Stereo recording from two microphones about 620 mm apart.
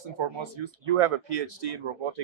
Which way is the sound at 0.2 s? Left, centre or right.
Right.